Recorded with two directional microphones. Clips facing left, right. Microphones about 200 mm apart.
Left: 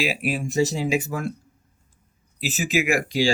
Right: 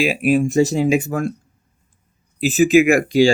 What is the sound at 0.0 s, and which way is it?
Speech, 50° right (ahead or behind).